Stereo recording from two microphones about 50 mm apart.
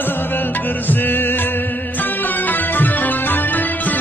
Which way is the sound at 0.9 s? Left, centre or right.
Left.